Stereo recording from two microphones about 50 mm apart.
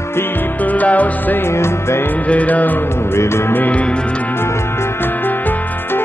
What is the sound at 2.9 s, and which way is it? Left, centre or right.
Music, left.